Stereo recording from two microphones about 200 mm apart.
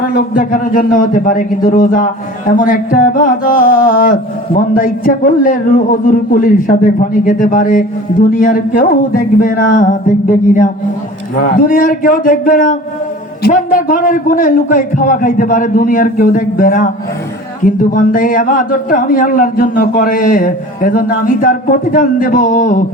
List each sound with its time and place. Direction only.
0.0 s a man's voice: 45° left (ahead or behind)
2.5 s a sound: 40° left (ahead or behind)
13.4 s a man's voice: 45° left (ahead or behind)